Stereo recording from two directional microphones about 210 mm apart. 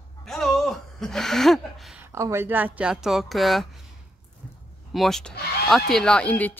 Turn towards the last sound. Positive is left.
turn(degrees=5)  # may be behind; listen again after turning